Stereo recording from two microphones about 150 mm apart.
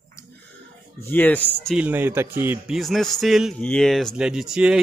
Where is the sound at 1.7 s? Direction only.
10° right (ahead or behind).